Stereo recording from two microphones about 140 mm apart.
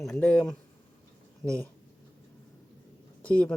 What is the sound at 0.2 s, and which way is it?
Speech, 10° left (ahead or behind).